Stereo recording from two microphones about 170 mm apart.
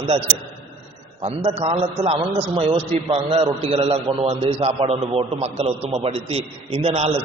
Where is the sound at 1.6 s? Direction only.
35° right (ahead or behind).